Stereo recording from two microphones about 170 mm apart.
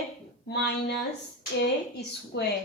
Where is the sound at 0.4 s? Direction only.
75° left (ahead or behind).